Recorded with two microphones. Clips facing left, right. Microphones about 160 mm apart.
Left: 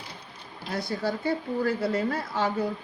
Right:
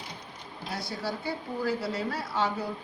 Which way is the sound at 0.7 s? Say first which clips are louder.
Left 5 dB; 50° left (ahead or behind).